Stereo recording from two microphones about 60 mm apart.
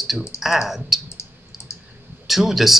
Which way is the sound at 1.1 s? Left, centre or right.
Left.